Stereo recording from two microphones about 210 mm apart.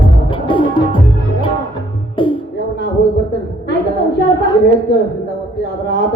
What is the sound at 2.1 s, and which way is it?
Music, 25° left (ahead or behind).